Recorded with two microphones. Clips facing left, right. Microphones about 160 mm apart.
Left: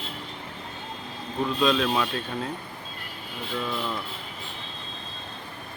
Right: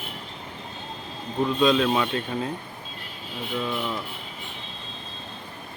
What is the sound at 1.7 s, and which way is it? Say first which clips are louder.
Speech: right 3 dB; 10° right (ahead or behind).